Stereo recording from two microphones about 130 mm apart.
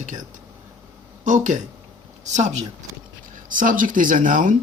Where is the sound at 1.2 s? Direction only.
70° right (ahead or behind).